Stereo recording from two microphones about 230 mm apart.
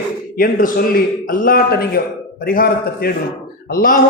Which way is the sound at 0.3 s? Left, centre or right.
Left.